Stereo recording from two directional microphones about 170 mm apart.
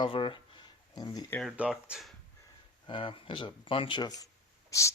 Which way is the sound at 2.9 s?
30° left (ahead or behind).